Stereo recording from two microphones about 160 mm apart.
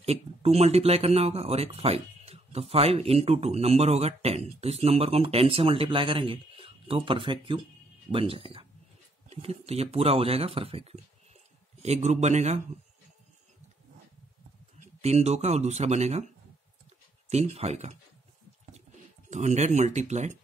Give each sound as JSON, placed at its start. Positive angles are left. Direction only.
{"t": 0.0, "sound": "speech", "side_deg": -40}
{"t": 14.8, "sound": "speech", "side_deg": -40}
{"t": 17.3, "sound": "speech", "side_deg": -45}
{"t": 19.3, "sound": "speech", "side_deg": -45}